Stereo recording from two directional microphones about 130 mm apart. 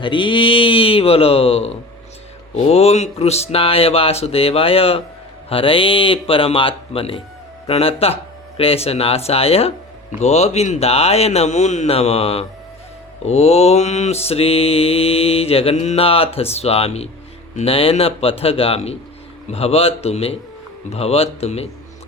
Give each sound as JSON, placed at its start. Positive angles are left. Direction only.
{"t": 0.0, "sound": "mantra", "side_deg": 40}
{"t": 10.2, "sound": "speech", "side_deg": 60}
{"t": 13.2, "sound": "mantra", "side_deg": 55}